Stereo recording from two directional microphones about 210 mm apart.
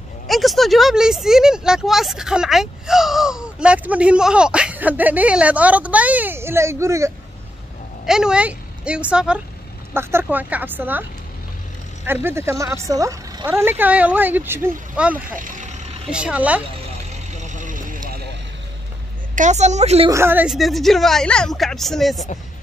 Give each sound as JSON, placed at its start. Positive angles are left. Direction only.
{"t": 0.3, "sound": "speech", "side_deg": 0}
{"t": 8.0, "sound": "a woman's voice", "side_deg": -5}
{"t": 12.1, "sound": "speech", "side_deg": -10}
{"t": 15.4, "sound": "vehicle", "side_deg": -35}
{"t": 16.1, "sound": "speech", "side_deg": -5}
{"t": 17.4, "sound": "vehicle", "side_deg": -35}
{"t": 19.3, "sound": "a woman's voice", "side_deg": -35}
{"t": 20.1, "sound": "speech", "side_deg": -10}